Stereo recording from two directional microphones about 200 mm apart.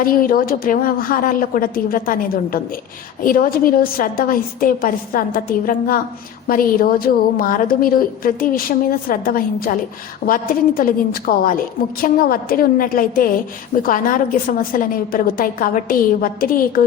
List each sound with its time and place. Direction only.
0.0 s a woman's voice: 45° left (ahead or behind)